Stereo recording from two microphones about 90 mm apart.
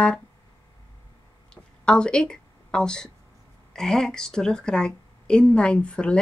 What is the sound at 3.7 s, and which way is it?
Speech, 5° left (ahead or behind).